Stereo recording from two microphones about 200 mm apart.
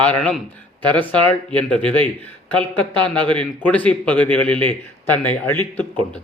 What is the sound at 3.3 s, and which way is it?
A man's voice, 5° left (ahead or behind).